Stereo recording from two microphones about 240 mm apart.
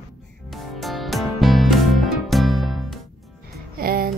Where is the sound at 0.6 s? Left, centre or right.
Centre.